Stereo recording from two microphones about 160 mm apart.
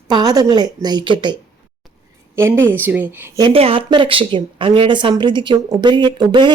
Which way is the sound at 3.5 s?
35° right (ahead or behind).